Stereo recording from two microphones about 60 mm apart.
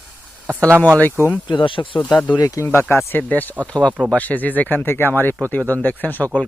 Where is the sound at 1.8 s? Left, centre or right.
Left.